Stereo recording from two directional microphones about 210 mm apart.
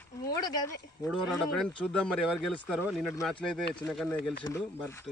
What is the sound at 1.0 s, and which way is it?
Speech, centre (ahead or behind).